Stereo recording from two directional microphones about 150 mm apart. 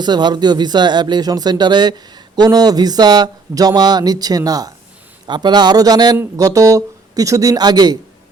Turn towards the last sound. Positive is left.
turn(degrees=-25)  # may be behind; listen again after turning